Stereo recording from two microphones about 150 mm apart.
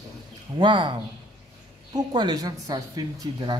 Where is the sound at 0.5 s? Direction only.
30° right (ahead or behind).